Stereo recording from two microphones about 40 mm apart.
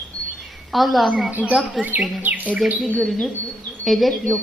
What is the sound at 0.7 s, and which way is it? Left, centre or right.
Speech, centre.